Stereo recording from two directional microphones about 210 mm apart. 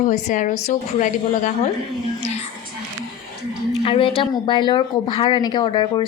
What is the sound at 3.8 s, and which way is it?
Speech, 25° left (ahead or behind).